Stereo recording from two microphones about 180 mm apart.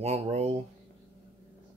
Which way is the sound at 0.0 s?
35° right (ahead or behind).